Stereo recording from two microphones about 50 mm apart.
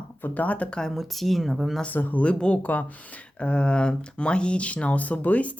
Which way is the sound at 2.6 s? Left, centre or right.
Left.